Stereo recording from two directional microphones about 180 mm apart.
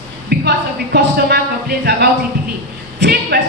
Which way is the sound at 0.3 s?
65° right (ahead or behind).